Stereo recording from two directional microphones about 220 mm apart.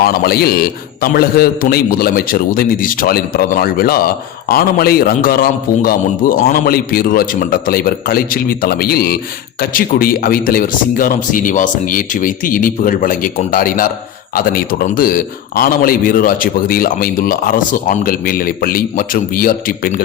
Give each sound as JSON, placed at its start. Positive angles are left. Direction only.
{"t": 0.0, "sound": "a man's voice", "side_deg": 45}